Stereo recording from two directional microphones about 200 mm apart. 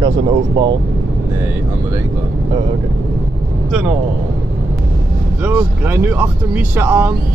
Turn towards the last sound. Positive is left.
turn(degrees=-10)  # may be behind; listen again after turning